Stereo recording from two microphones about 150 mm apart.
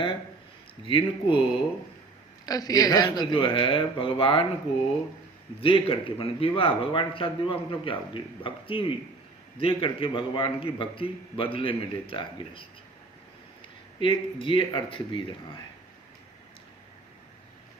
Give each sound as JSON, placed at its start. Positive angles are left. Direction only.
{"t": 0.9, "sound": "speech", "side_deg": 35}
{"t": 2.5, "sound": "speech", "side_deg": 25}
{"t": 5.6, "sound": "speech", "side_deg": 35}
{"t": 14.0, "sound": "speech", "side_deg": 35}